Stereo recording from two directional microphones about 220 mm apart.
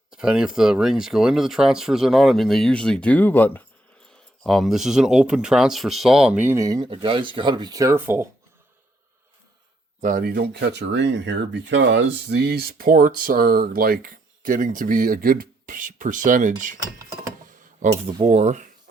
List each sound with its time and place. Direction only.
0.1 s speech: 5° right (ahead or behind)
10.0 s speech: 40° right (ahead or behind)
18.1 s speech: 25° right (ahead or behind)